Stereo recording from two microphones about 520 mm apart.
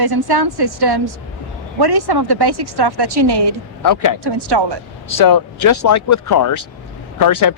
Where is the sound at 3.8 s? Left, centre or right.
Left.